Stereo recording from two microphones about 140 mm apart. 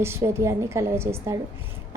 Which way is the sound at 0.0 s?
20° right (ahead or behind).